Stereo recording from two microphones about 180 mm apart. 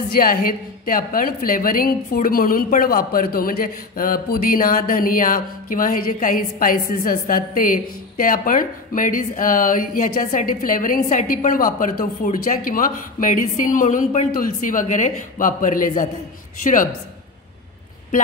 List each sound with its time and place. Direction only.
0.1 s a woman's voice: 50° left (ahead or behind)